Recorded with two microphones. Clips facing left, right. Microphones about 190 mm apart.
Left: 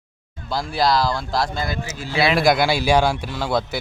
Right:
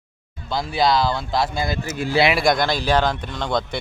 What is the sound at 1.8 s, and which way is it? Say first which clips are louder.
Speech: right 6 dB; 55° right (ahead or behind).